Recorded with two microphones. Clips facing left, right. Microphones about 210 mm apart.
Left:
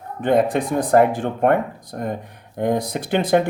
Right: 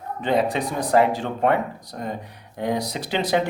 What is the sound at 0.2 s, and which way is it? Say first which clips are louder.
Speech: left 4 dB; 50° left (ahead or behind).